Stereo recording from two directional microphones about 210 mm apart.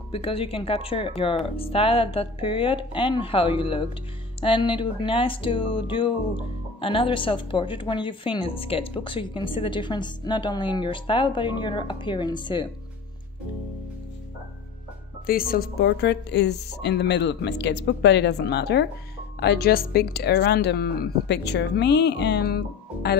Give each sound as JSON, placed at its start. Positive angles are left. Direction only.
{"t": 0.1, "sound": "speech", "side_deg": 25}
{"t": 15.2, "sound": "speech", "side_deg": 45}